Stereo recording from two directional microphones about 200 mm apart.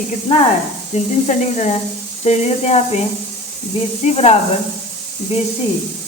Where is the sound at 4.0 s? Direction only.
30° left (ahead or behind).